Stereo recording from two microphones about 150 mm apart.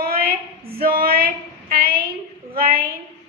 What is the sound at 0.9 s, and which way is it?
Female singing, 85° right.